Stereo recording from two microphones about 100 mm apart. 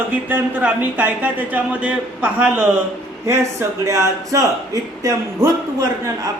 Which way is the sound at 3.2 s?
30° right (ahead or behind).